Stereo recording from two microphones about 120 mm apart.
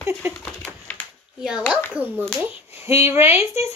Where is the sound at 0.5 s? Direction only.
10° left (ahead or behind).